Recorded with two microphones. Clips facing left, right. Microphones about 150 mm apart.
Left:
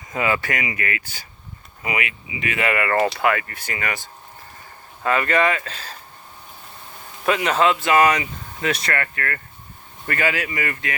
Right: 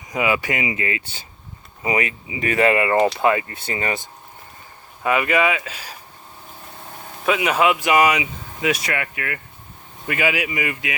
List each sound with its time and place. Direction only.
0.1 s speech: 15° right (ahead or behind); by 2.7 s 35° right (ahead or behind)
2.7 s speech: 20° right (ahead or behind)
5.0 s speech: 10° right (ahead or behind)
7.3 s speech: 5° right (ahead or behind)